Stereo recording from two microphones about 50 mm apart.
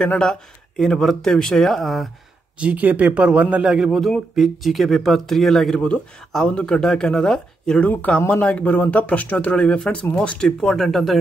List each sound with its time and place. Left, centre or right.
0.0 s speech: centre
2.6 s a man's voice: right
3.8 s speech: centre
6.4 s speech: left
7.8 s speech: left; by 11.1 s centre